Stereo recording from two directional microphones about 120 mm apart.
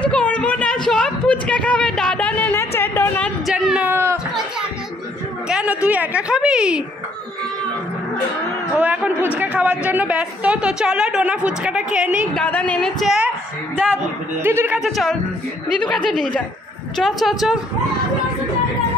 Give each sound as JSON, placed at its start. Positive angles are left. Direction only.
{"t": 0.0, "sound": "a sound", "side_deg": 10}
{"t": 3.4, "sound": "a sound", "side_deg": -5}
{"t": 5.5, "sound": "a sound", "side_deg": -10}
{"t": 5.9, "sound": "a woman's voice", "side_deg": -10}
{"t": 8.7, "sound": "a woman's voice", "side_deg": -15}
{"t": 12.4, "sound": "a woman's voice", "side_deg": 10}
{"t": 13.0, "sound": "a woman's voice", "side_deg": -5}
{"t": 14.4, "sound": "speech", "side_deg": -20}
{"t": 14.8, "sound": "a woman's voice", "side_deg": 0}